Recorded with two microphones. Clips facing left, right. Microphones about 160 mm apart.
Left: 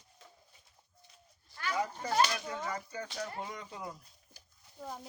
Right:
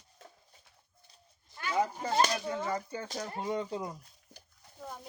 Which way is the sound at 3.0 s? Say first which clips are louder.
Right 4 dB; 40° right (ahead or behind).